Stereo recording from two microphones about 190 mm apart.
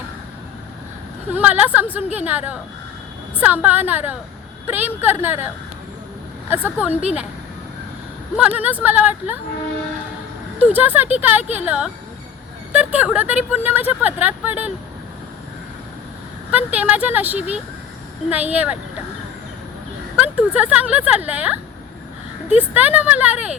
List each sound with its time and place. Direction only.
1.3 s speech: 10° right (ahead or behind)
6.5 s speech: 10° right (ahead or behind)
8.4 s speech: 10° right (ahead or behind)
10.6 s speech: 10° right (ahead or behind)
16.5 s speech: 10° right (ahead or behind)
20.1 s speech: 5° right (ahead or behind)
22.7 s speech: 10° right (ahead or behind)